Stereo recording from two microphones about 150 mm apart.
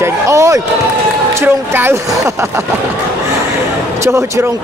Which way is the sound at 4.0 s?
20° right (ahead or behind).